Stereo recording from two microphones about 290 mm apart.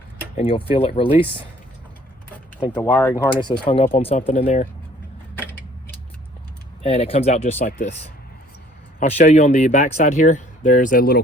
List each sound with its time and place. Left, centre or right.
0.3 s speech: centre
2.7 s speech: centre
3.6 s speech: centre
5.3 s a sound: centre
6.8 s speech: left